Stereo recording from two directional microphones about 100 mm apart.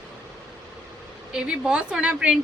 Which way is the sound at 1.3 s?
10° right (ahead or behind).